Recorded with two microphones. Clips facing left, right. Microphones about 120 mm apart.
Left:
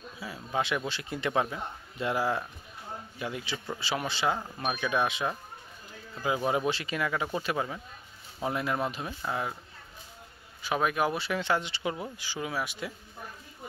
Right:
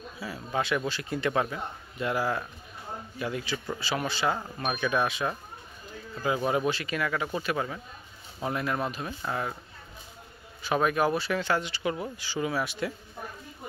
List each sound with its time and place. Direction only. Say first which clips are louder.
0.2 s a man's voice: right 1 dB; 15° left (ahead or behind)
10.6 s a man's voice: right 3 dB; 10° left (ahead or behind)
12.2 s speech: right 4 dB; 10° left (ahead or behind)